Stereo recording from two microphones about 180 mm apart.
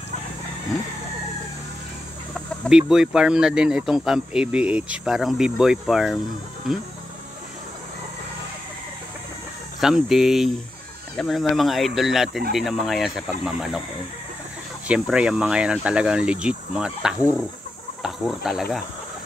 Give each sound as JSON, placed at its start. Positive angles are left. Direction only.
{"t": 2.6, "sound": "speech", "side_deg": -5}
{"t": 9.8, "sound": "speech", "side_deg": 0}
{"t": 14.9, "sound": "speech", "side_deg": -5}